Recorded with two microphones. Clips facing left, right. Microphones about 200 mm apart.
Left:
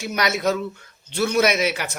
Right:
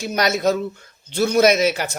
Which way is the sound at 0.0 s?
35° right (ahead or behind).